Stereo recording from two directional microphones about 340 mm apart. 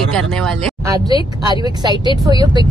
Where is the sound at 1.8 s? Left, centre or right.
Centre.